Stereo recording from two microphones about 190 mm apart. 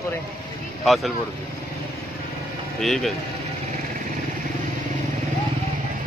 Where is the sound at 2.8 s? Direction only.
Centre (ahead or behind).